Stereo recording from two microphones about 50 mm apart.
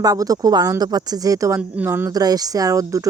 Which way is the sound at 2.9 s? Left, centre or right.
Right.